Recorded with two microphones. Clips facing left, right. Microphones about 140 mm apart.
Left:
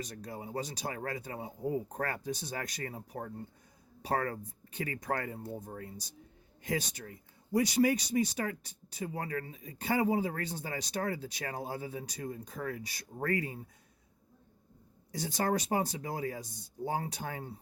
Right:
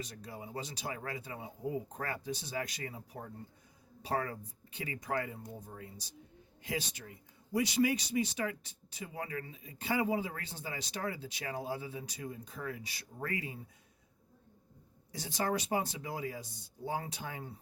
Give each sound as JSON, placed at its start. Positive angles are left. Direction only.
{"t": 0.0, "sound": "speech", "side_deg": 45}
{"t": 15.1, "sound": "speech", "side_deg": 45}